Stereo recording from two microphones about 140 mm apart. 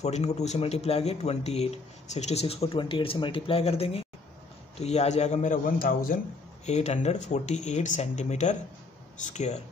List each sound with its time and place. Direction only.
0.0 s speech: 55° left (ahead or behind); by 6.1 s 90° left
6.6 s speech: 55° left (ahead or behind)